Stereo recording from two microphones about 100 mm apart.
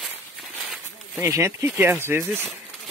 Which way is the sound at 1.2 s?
25° right (ahead or behind).